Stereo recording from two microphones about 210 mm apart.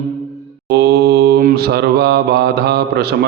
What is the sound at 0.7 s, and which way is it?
Mantra, 50° right (ahead or behind).